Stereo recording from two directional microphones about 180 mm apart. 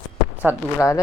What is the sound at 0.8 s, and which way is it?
Speech, 15° left (ahead or behind).